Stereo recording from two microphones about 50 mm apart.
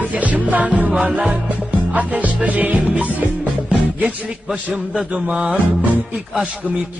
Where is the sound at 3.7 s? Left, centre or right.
Centre.